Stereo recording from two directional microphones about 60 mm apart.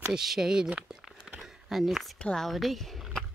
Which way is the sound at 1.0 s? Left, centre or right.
Centre.